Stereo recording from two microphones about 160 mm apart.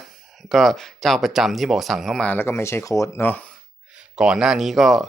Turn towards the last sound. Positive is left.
turn(degrees=0)  # may be behind; listen again after turning